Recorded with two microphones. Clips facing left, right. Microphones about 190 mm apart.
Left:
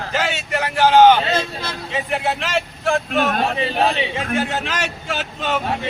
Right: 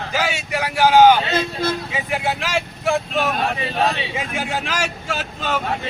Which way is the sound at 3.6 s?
20° left (ahead or behind).